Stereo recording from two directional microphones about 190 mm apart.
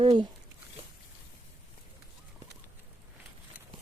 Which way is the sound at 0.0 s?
25° right (ahead or behind).